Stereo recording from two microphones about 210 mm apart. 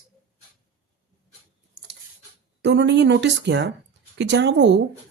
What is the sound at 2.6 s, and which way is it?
Speech, 55° right (ahead or behind).